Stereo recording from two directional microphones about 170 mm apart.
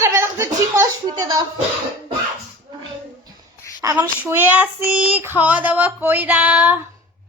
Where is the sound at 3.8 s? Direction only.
15° right (ahead or behind).